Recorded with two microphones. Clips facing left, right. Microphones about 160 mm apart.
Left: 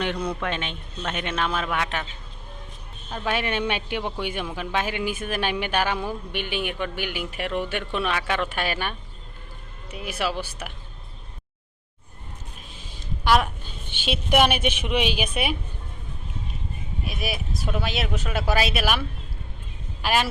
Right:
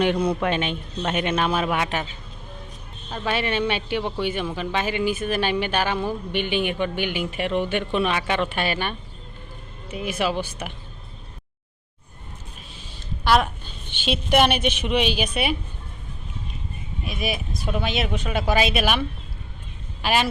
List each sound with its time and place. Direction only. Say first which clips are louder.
0.2 s speech: right 6 dB; 25° right (ahead or behind); by 2.0 s 10° right (ahead or behind)
3.1 s speech: right 1 dB; 10° left (ahead or behind)
13.2 s a woman's voice: right 1 dB; 10° left (ahead or behind)
17.1 s speech: right 3 dB; centre (ahead or behind)